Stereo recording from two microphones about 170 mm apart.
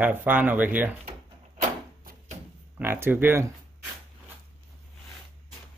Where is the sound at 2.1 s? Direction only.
55° right (ahead or behind).